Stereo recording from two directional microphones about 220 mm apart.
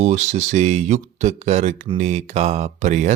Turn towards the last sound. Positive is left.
turn(degrees=-30)  # may be behind; listen again after turning